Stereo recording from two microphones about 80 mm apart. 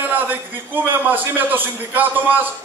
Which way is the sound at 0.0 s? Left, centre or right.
Right.